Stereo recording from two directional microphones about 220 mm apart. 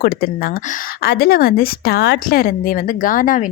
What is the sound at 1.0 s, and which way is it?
Speech, 45° left (ahead or behind).